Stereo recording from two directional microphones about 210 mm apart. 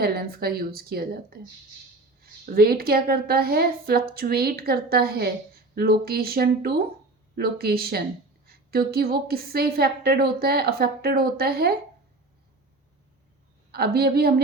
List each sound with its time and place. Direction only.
0.0 s a woman's voice: 45° right (ahead or behind)
13.7 s a woman's voice: 45° right (ahead or behind)